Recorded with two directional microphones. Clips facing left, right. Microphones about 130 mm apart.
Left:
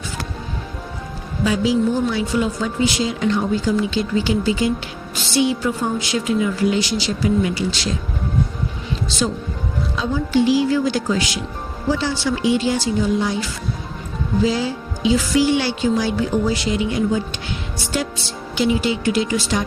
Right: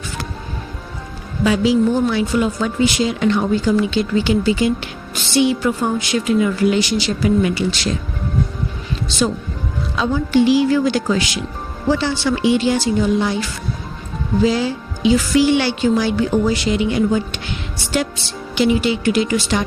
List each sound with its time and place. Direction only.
1.5 s a woman's voice: 70° right (ahead or behind)
9.9 s a woman's voice: 70° right (ahead or behind)
18.5 s speech: 70° right (ahead or behind)